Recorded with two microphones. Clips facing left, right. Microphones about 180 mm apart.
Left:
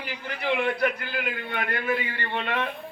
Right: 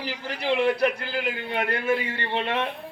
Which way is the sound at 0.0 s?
30° right (ahead or behind).